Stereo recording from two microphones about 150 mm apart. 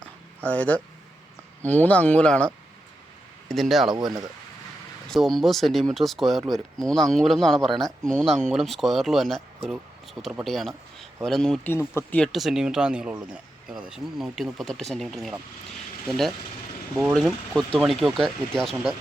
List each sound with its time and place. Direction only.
0.4 s speech: 10° left (ahead or behind)
3.5 s speech: centre (ahead or behind)
5.0 s speech: centre (ahead or behind)
11.7 s speech: 15° left (ahead or behind)
12.2 s speech: centre (ahead or behind)